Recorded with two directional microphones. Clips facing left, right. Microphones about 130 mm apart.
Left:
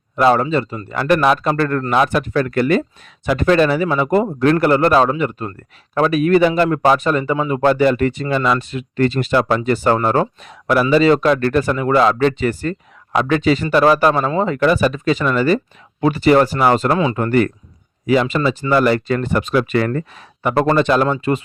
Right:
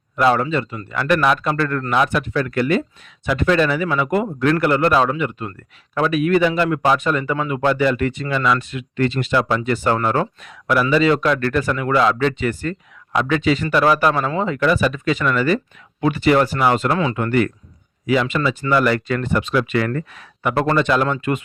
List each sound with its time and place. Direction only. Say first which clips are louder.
0.2 s speech: left 3 dB; 35° left (ahead or behind)